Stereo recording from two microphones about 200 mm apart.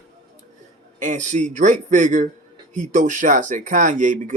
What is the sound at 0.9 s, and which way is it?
Speech, 40° right (ahead or behind).